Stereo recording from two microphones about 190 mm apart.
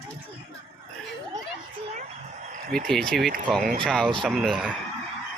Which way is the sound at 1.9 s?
35° right (ahead or behind).